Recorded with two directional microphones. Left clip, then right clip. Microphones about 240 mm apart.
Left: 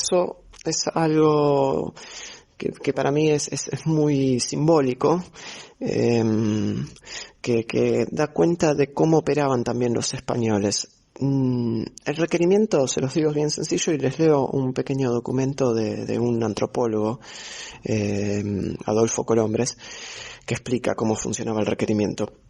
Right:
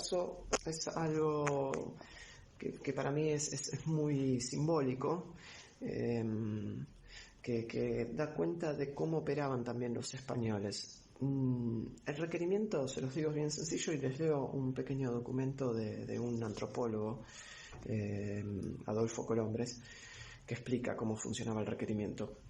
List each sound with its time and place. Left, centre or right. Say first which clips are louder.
0.1 s speech: left 12 dB; left